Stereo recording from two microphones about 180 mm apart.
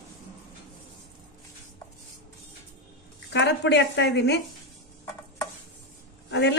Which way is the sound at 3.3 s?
75° left (ahead or behind).